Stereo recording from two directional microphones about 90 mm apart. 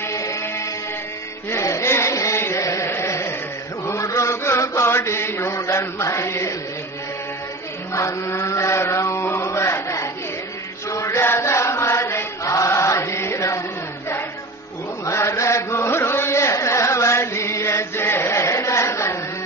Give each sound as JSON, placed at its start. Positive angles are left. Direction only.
{"t": 0.0, "sound": "music", "side_deg": 35}
{"t": 1.5, "sound": "a sound", "side_deg": 35}
{"t": 2.9, "sound": "carnatic music", "side_deg": 30}
{"t": 3.8, "sound": "chant", "side_deg": 35}
{"t": 7.9, "sound": "chant", "side_deg": 30}